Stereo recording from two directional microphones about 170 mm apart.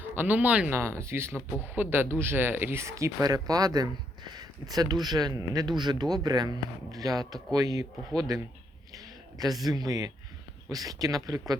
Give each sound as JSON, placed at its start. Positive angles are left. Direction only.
{"t": 0.2, "sound": "speech", "side_deg": -10}
{"t": 8.9, "sound": "a sound", "side_deg": -20}
{"t": 9.6, "sound": "speech", "side_deg": -20}